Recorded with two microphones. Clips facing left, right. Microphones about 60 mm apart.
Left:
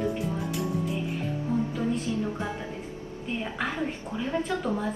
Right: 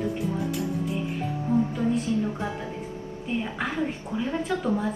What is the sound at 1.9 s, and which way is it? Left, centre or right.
A woman's voice, centre.